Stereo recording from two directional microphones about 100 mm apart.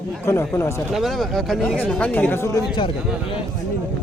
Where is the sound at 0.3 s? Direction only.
25° left (ahead or behind).